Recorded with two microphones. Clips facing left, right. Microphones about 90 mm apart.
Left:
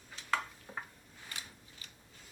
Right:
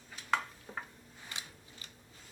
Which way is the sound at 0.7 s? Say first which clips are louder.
Right 1 dB; 5° left (ahead or behind).